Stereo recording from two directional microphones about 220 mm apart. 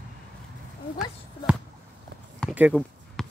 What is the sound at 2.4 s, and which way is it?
Basketball bounce, 5° right (ahead or behind).